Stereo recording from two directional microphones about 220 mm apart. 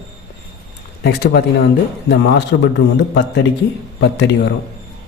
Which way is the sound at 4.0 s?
55° left (ahead or behind).